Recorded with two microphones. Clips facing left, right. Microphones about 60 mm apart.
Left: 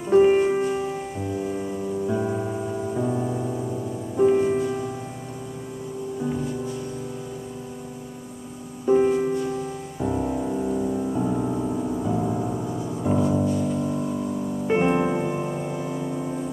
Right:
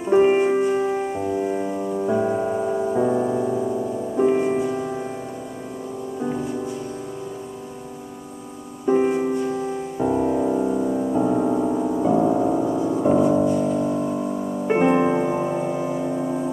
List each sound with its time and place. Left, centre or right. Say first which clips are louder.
0.0 s music: even; right
0.8 s music: right 6 dB; right
8.8 s music: even; right